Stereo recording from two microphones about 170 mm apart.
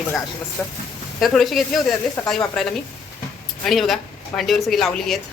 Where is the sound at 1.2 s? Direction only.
Centre (ahead or behind).